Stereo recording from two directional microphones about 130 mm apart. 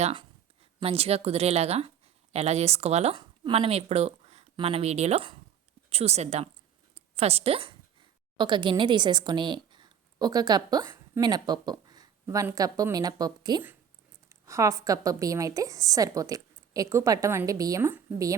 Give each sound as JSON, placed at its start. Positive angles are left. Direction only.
{"t": 0.1, "sound": "speech", "side_deg": -40}
{"t": 3.2, "sound": "speech", "side_deg": -40}
{"t": 6.9, "sound": "a sound", "side_deg": -50}
{"t": 8.4, "sound": "a woman's voice", "side_deg": -35}
{"t": 10.8, "sound": "a sound", "side_deg": -20}
{"t": 11.2, "sound": "a woman's voice", "side_deg": -35}